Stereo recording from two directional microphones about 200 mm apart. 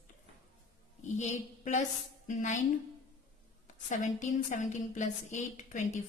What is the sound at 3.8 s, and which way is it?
A woman's voice, 40° left (ahead or behind).